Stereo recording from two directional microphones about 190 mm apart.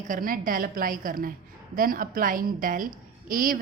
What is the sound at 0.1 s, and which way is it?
A woman's voice, 45° right (ahead or behind).